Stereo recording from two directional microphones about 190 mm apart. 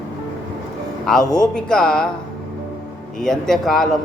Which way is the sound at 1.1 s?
5° left (ahead or behind).